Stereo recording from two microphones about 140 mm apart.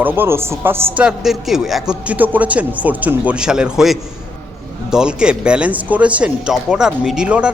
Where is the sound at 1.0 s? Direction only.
5° right (ahead or behind).